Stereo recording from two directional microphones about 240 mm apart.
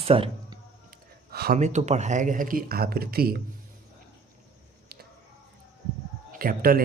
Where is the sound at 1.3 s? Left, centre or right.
Right.